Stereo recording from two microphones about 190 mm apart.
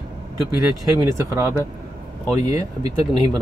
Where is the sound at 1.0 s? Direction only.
15° right (ahead or behind).